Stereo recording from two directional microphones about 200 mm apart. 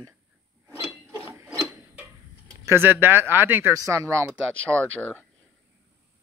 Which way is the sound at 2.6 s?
10° right (ahead or behind).